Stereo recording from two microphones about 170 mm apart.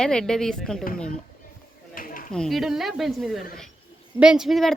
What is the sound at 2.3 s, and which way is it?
Speech, centre (ahead or behind).